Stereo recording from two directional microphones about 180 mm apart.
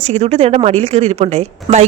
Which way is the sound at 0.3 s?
35° right (ahead or behind).